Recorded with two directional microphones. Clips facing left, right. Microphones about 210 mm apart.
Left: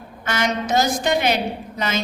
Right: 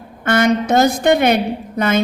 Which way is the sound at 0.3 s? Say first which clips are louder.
Right 8 dB; 55° right (ahead or behind).